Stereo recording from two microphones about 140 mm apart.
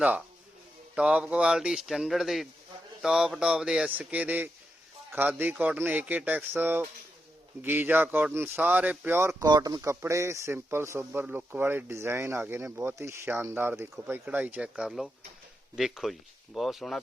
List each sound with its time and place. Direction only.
0.9 s speech: 5° right (ahead or behind)
9.4 s speech: 30° right (ahead or behind); by 17.0 s centre (ahead or behind)